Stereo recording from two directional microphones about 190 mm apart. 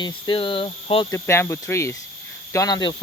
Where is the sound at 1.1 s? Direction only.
15° left (ahead or behind).